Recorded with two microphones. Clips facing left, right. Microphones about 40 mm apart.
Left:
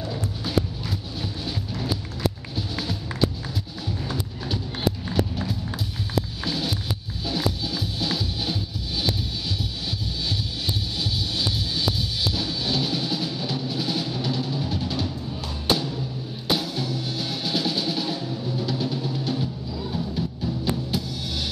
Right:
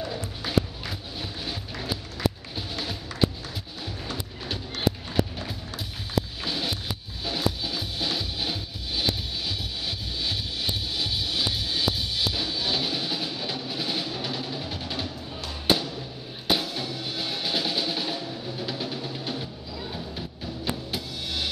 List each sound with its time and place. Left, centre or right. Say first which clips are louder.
0.0 s music: left 2 dB; centre
6.4 s music: left 2 dB; centre
11.0 s music: right 1 dB; centre